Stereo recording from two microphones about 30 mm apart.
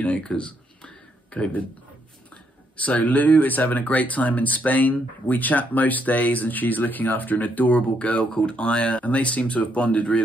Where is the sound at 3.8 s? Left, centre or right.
Left.